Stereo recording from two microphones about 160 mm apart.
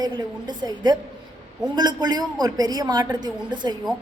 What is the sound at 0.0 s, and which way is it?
A woman's voice, 25° right (ahead or behind).